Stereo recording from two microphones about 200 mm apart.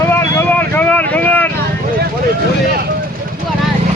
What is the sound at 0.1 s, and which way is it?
Vehicle, 10° left (ahead or behind).